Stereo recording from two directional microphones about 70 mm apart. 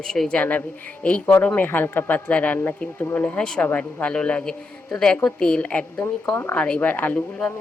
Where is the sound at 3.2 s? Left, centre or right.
Centre.